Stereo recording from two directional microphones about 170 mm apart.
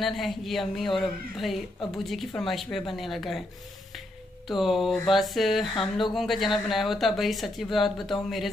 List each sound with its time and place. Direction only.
0.0 s speech: centre (ahead or behind)
4.5 s speech: centre (ahead or behind)